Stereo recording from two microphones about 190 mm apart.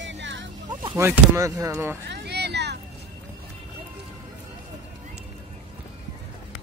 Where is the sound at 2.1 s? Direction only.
60° right (ahead or behind).